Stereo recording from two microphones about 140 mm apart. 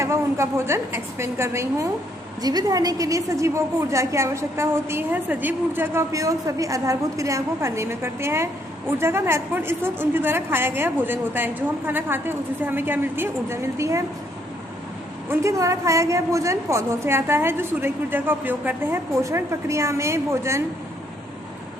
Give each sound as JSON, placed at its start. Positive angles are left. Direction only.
{"t": 0.0, "sound": "a woman's voice", "side_deg": -20}
{"t": 15.3, "sound": "a woman's voice", "side_deg": -20}